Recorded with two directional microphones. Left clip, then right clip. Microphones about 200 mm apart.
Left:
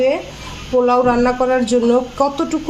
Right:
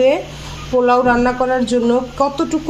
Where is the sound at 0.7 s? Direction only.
5° right (ahead or behind).